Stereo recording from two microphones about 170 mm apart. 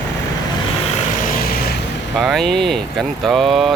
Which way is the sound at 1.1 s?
50° left (ahead or behind).